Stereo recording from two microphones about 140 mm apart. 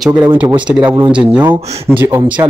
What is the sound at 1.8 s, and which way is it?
Speech, 15° right (ahead or behind).